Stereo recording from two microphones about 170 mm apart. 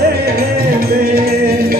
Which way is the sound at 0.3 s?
65° right (ahead or behind).